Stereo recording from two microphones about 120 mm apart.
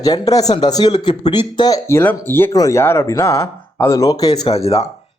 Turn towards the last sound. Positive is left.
turn(degrees=60)  # may be behind; listen again after turning